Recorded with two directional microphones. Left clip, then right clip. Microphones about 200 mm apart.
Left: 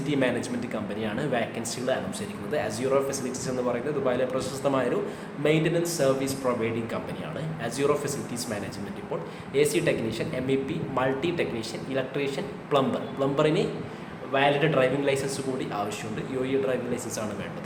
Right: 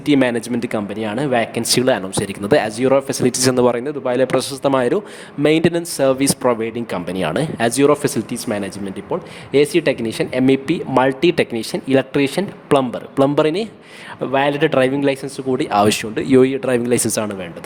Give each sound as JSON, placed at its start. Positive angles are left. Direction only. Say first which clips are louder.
{"t": 0.0, "sound": "speech", "louder": "right 10 dB", "side_deg": -55}